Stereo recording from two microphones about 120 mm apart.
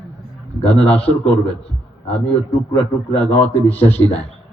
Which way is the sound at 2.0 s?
10° left (ahead or behind).